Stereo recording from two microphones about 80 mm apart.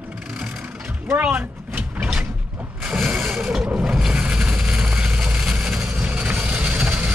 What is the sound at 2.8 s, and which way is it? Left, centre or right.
Mechanisms, centre.